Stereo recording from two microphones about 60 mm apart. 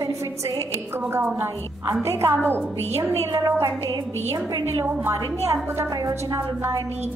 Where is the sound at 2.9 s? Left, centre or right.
Right.